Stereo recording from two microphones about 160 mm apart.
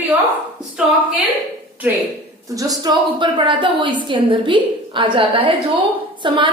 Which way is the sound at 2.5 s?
25° right (ahead or behind).